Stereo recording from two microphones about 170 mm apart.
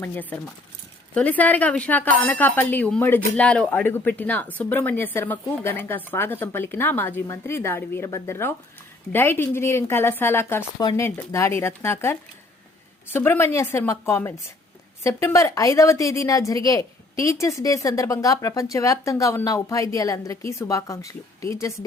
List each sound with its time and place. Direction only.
0.0 s speech: 10° left (ahead or behind)
13.1 s a woman's voice: 10° left (ahead or behind)